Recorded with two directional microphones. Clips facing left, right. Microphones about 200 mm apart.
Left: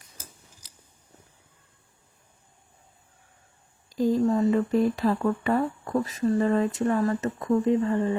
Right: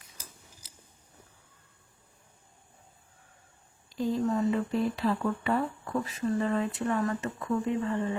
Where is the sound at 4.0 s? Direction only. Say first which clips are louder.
Left 6 dB; 40° left (ahead or behind).